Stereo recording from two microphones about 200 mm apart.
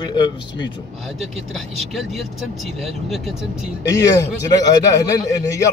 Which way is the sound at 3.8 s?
15° left (ahead or behind).